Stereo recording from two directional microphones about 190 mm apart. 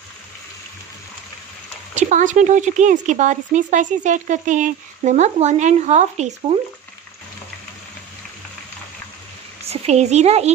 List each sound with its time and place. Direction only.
2.0 s speech: 40° right (ahead or behind)
9.7 s a child's voice: 35° right (ahead or behind)